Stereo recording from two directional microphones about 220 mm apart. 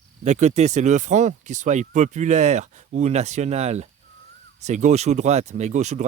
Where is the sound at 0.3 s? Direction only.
30° right (ahead or behind).